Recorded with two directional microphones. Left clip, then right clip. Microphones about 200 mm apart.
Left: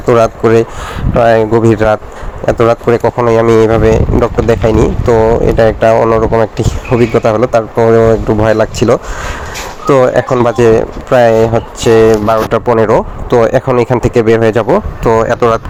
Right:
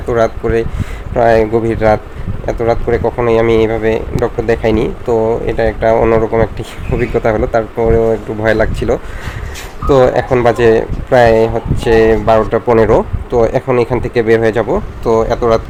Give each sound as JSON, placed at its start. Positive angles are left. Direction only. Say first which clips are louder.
{"t": 0.1, "sound": "speech", "louder": "left 5 dB", "side_deg": 25}